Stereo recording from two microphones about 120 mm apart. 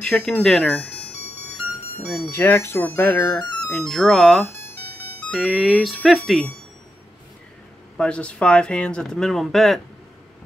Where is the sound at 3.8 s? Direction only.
5° left (ahead or behind).